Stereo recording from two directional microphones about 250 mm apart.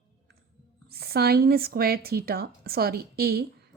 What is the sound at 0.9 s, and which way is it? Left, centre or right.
Speech, right.